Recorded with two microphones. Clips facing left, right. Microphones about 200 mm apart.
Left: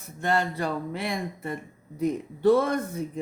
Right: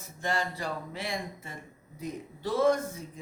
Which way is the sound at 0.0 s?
60° left (ahead or behind).